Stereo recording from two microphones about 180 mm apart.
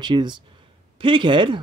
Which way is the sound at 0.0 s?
25° right (ahead or behind).